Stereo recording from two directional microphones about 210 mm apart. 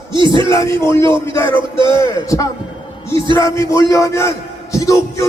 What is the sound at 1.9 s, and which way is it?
A man's voice, 15° left (ahead or behind).